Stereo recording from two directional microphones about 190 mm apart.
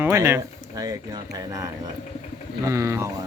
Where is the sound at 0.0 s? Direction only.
15° right (ahead or behind).